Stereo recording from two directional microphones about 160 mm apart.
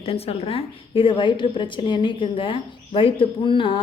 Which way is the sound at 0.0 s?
35° left (ahead or behind).